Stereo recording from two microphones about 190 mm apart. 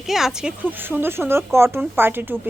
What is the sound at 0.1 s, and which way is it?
A woman's voice, centre (ahead or behind).